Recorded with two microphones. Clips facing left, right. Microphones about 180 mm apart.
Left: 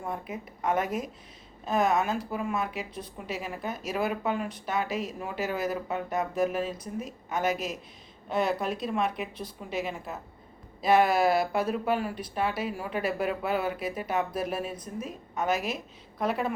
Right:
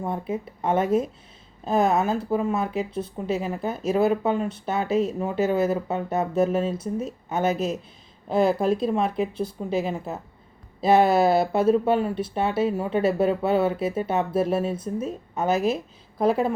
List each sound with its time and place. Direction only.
0.0 s speech: 30° right (ahead or behind)